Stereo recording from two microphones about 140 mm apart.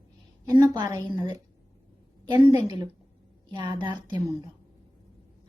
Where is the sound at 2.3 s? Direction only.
25° right (ahead or behind).